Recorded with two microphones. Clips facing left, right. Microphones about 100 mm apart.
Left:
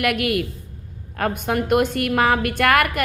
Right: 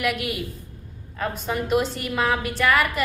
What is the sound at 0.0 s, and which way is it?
A woman's voice, 60° left (ahead or behind).